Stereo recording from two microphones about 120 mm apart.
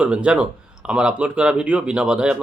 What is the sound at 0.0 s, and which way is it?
Speech, 10° right (ahead or behind).